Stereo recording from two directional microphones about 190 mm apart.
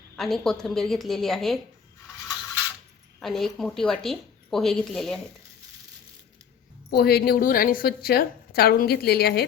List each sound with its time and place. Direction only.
0.2 s speech: centre (ahead or behind)
3.2 s speech: centre (ahead or behind)
6.9 s a woman's voice: 55° left (ahead or behind)